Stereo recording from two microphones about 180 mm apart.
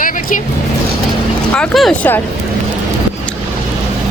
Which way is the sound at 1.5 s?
5° left (ahead or behind).